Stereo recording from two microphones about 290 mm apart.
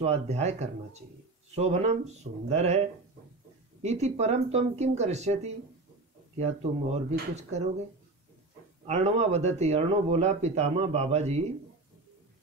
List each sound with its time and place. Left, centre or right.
0.0 s speech: right
3.8 s speech: right
8.8 s speech: right